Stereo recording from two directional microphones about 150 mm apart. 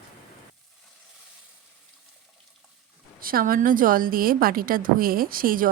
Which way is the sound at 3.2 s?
70° right (ahead or behind).